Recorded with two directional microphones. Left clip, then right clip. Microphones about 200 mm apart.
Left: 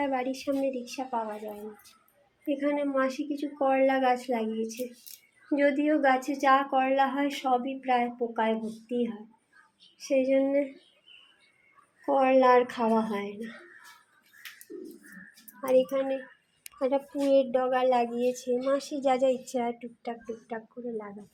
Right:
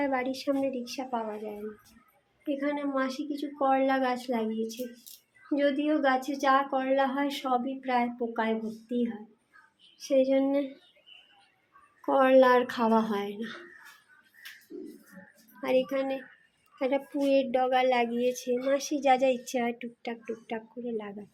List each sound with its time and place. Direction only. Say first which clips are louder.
0.0 s a woman's voice: even; 10° right (ahead or behind)
2.5 s a woman's voice: left 2 dB; 5° left (ahead or behind)
12.0 s speech: right 1 dB; 15° right (ahead or behind)
15.6 s speech: left 2 dB; 10° right (ahead or behind)